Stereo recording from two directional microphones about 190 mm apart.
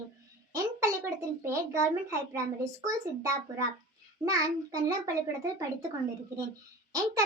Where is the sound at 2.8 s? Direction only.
15° right (ahead or behind).